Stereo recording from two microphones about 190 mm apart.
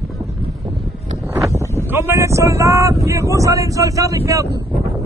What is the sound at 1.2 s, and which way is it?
Wind, 15° right (ahead or behind).